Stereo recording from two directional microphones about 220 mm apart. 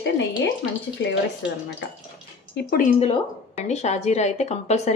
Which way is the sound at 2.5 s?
40° left (ahead or behind).